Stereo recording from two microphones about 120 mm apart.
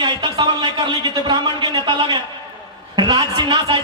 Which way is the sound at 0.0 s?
40° right (ahead or behind).